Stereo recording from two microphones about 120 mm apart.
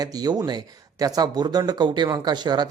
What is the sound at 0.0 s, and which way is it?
Speech, 30° right (ahead or behind).